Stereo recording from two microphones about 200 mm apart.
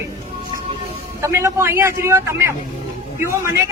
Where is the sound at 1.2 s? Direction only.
15° right (ahead or behind).